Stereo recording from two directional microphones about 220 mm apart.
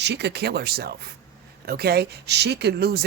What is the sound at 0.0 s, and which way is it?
Speech, 50° right (ahead or behind).